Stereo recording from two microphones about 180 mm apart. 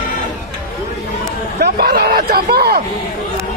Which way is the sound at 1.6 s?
60° right (ahead or behind).